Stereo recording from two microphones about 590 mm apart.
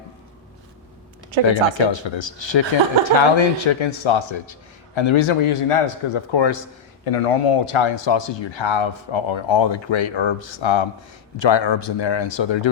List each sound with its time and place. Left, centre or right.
1.5 s speech: left
7.0 s speech: left